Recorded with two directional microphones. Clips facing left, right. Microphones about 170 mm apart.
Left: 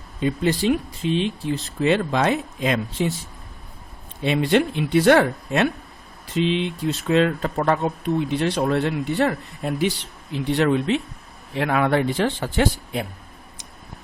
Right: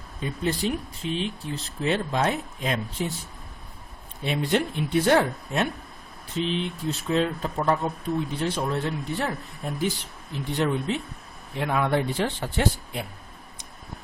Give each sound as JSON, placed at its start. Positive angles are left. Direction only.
{"t": 0.2, "sound": "speech", "side_deg": 90}
{"t": 4.2, "sound": "speech", "side_deg": 90}